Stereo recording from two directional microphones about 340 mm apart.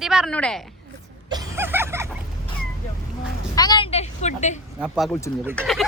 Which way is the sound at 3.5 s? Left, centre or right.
Centre.